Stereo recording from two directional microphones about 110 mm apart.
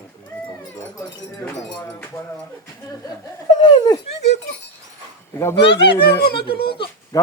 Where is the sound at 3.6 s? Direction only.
45° left (ahead or behind).